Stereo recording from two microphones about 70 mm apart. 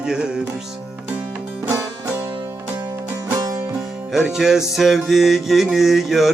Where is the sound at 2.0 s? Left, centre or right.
Right.